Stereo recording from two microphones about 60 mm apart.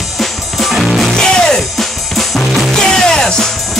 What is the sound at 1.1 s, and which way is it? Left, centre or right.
Music, centre.